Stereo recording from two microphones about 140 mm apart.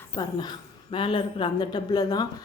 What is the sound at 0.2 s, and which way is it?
A woman's voice, 30° left (ahead or behind).